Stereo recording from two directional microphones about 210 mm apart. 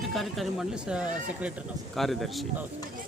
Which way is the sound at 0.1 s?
Centre (ahead or behind).